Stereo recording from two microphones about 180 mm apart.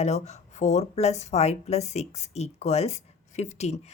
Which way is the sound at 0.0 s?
40° left (ahead or behind).